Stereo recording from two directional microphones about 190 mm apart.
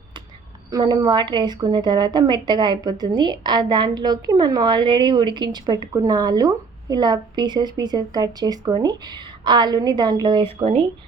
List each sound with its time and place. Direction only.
0.7 s a woman's voice: 20° right (ahead or behind)